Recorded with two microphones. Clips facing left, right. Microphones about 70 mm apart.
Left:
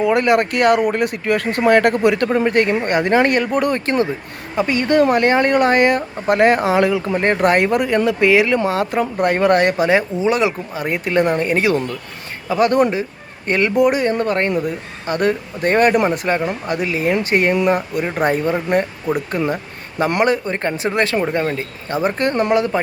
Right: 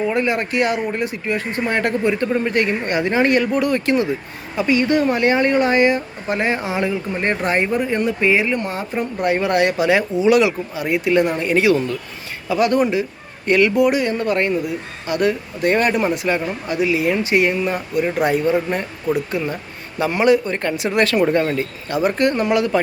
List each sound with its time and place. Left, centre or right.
0.0 s speech: left
9.2 s speech: left
19.1 s speech: left
20.5 s speech: left
21.2 s speech: centre
21.8 s speech: left